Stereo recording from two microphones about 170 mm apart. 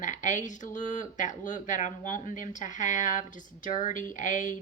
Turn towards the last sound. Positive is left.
turn(degrees=45)  # may be behind; listen again after turning